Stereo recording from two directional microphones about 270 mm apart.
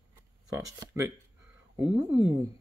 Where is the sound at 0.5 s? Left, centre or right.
Centre.